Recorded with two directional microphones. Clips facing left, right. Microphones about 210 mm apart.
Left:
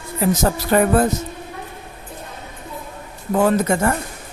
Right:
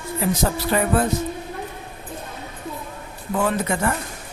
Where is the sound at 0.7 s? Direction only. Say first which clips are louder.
Left 5 dB; 50° left (ahead or behind).